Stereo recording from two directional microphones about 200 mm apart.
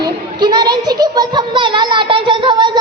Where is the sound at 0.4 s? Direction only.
20° right (ahead or behind).